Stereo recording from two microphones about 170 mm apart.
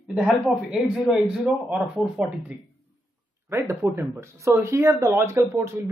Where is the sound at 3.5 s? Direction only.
15° right (ahead or behind).